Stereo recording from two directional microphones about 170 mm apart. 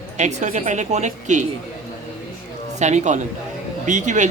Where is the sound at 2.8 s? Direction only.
45° right (ahead or behind).